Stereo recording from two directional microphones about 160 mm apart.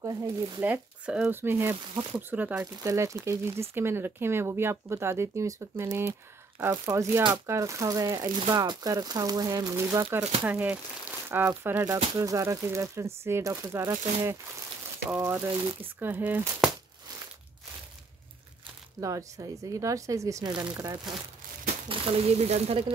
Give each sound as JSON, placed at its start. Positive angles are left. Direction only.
{"t": 0.0, "sound": "speech", "side_deg": -25}
{"t": 0.7, "sound": "speech", "side_deg": -10}
{"t": 18.9, "sound": "speech", "side_deg": -20}
{"t": 21.8, "sound": "speech", "side_deg": -35}